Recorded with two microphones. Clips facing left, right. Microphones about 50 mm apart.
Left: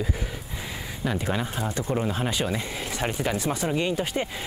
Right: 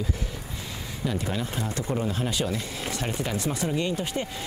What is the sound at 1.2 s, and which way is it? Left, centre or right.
Speech, left.